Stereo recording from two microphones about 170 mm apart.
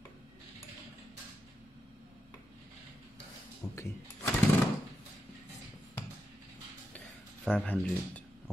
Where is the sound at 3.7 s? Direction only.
15° left (ahead or behind).